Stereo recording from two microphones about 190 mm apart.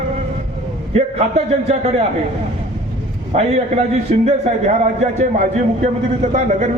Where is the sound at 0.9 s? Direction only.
35° right (ahead or behind).